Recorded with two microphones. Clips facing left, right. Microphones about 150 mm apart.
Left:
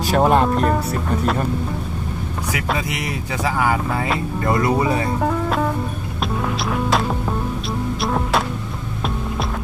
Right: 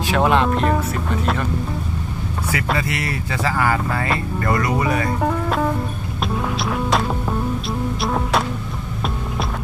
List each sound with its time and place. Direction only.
0.0 s speech: 40° left (ahead or behind)
0.5 s speech: 5° left (ahead or behind)
2.7 s speech: 15° left (ahead or behind)
5.0 s speech: centre (ahead or behind)
6.3 s music: centre (ahead or behind)